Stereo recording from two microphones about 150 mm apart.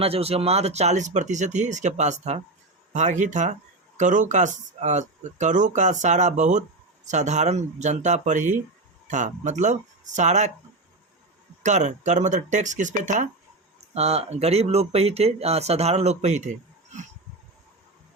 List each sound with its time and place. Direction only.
0.0 s speech: 40° right (ahead or behind)
11.6 s speech: 55° right (ahead or behind)